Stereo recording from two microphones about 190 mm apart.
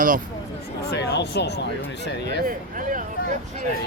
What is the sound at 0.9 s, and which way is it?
Speech, 60° left (ahead or behind).